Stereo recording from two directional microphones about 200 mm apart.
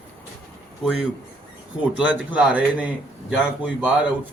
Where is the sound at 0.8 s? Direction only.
5° right (ahead or behind).